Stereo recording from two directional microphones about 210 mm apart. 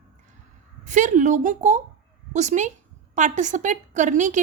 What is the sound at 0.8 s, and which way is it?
A child's voice, 35° right (ahead or behind).